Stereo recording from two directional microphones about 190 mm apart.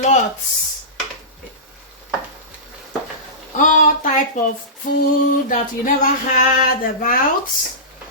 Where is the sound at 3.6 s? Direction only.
45° left (ahead or behind).